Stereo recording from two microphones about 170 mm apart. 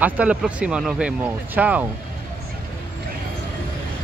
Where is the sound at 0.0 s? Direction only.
5° right (ahead or behind).